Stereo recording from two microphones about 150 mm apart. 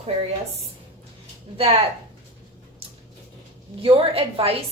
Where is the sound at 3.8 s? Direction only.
35° right (ahead or behind).